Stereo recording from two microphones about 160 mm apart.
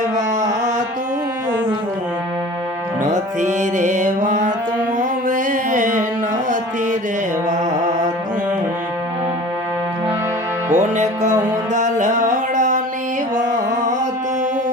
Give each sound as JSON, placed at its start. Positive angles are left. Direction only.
{"t": 3.0, "sound": "music", "side_deg": -50}
{"t": 10.7, "sound": "music", "side_deg": -45}